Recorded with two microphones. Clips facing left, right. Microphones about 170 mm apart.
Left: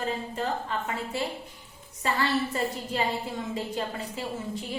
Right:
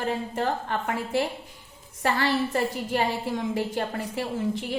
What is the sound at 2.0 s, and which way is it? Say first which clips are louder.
A woman's voice: right 2 dB; 65° right (ahead or behind).